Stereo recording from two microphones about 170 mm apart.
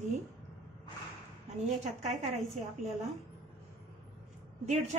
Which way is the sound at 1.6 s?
40° right (ahead or behind).